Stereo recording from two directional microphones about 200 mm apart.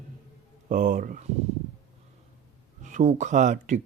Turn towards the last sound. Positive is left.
turn(degrees=-40)  # may be behind; listen again after turning